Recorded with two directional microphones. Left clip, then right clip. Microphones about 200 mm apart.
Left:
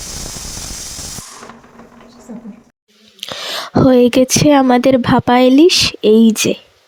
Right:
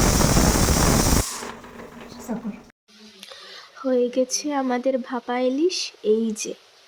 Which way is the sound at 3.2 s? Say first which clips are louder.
Left 18 dB; 45° left (ahead or behind).